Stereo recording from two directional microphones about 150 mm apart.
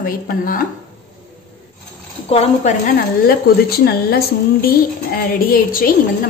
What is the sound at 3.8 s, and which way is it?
A woman's voice, 90° left.